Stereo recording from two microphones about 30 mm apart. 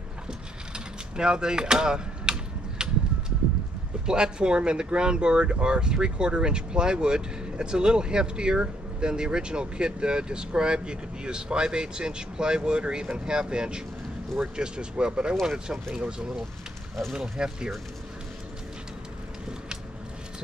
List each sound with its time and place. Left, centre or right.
0.7 s mechanisms: right
2.8 s a sound: right
4.0 s speech: right
17.1 s speech: right